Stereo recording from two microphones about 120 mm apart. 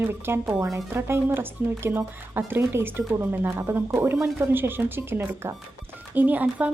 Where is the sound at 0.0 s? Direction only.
20° right (ahead or behind).